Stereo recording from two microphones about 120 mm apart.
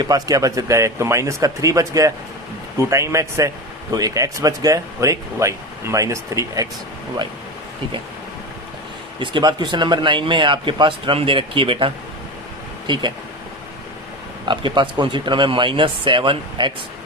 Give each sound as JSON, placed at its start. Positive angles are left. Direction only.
{"t": 0.0, "sound": "speech", "side_deg": -30}
{"t": 9.1, "sound": "a man's voice", "side_deg": -40}
{"t": 12.9, "sound": "speech", "side_deg": -40}
{"t": 14.4, "sound": "a man's voice", "side_deg": -40}